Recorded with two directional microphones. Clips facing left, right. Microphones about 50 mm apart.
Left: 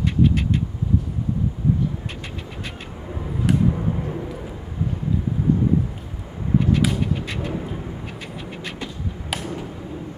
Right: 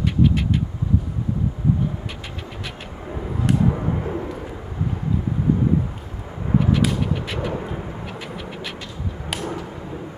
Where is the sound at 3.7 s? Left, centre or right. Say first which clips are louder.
Right 1 dB; right.